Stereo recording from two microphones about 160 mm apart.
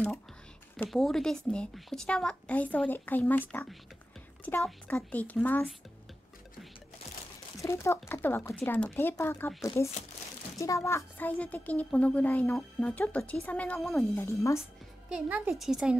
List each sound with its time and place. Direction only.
0.7 s a woman's voice: centre (ahead or behind)
7.6 s a woman's voice: 15° left (ahead or behind); by 14.0 s centre (ahead or behind)
14.1 s a woman's voice: 15° left (ahead or behind)
15.0 s a woman's voice: 10° right (ahead or behind)